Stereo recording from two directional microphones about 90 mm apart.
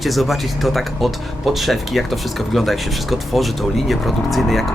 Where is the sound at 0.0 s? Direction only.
Centre (ahead or behind).